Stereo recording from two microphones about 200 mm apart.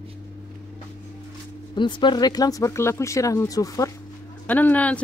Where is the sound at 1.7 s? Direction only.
25° left (ahead or behind); by 5.0 s 5° left (ahead or behind).